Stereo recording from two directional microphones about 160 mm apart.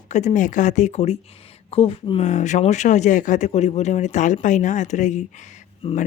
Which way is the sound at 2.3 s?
50° left (ahead or behind).